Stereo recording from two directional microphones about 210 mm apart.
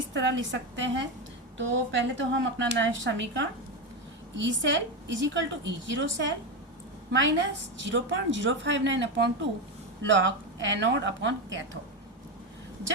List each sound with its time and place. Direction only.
0.1 s a woman's voice: 60° right (ahead or behind)